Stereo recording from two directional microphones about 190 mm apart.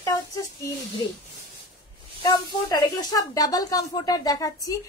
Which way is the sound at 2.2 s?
20° left (ahead or behind).